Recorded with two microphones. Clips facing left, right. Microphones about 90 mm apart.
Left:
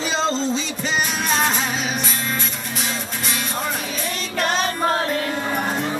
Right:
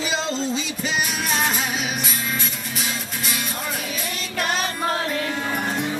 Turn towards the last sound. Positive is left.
turn(degrees=35)  # may be behind; listen again after turning